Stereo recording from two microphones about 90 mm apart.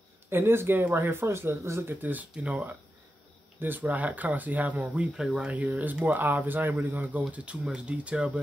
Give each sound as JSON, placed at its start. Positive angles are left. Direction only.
{"t": 0.3, "sound": "speech", "side_deg": -25}
{"t": 4.9, "sound": "speech", "side_deg": -10}